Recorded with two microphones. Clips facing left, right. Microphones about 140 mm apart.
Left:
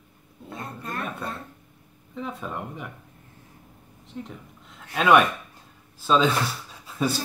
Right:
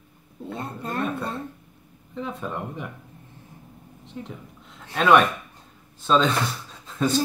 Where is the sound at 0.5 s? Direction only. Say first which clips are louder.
Right 4 dB; 25° right (ahead or behind).